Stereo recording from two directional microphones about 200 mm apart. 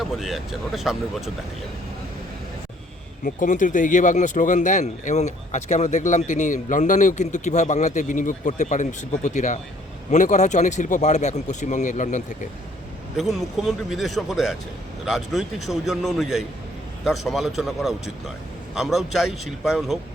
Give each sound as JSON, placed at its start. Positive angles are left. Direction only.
{"t": 0.0, "sound": "a man's voice", "side_deg": 0}
{"t": 3.2, "sound": "speech", "side_deg": 40}
{"t": 13.1, "sound": "a man's voice", "side_deg": 0}